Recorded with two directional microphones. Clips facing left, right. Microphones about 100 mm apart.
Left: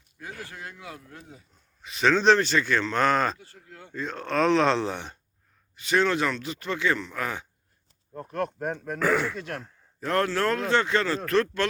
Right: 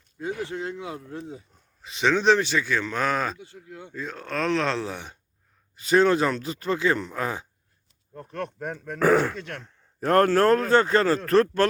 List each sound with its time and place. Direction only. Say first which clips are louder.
0.2 s speech: right 9 dB; 25° right (ahead or behind)
1.3 s a sound: right 9 dB; 30° right (ahead or behind)
2.0 s speech: even; 15° right (ahead or behind)
3.3 s speech: right 6 dB; 20° right (ahead or behind)
3.9 s speech: left 4 dB; 5° right (ahead or behind)
5.9 s speech: right 4 dB; 35° right (ahead or behind)
8.3 s speech: left 3 dB; 5° left (ahead or behind)
9.0 s a man's voice: right 5 dB; 45° right (ahead or behind)
9.3 s speech: left 1 dB; 5° left (ahead or behind)
10.0 s a man's voice: right 6 dB; 50° right (ahead or behind)